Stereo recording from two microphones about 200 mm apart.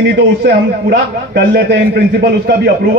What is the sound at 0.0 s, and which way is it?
A man's voice, 55° right (ahead or behind).